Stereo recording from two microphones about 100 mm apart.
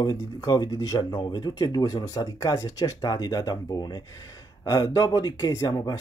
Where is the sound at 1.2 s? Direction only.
50° left (ahead or behind).